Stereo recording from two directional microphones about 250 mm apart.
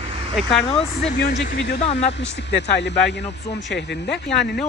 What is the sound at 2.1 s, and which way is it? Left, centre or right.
Speech, left.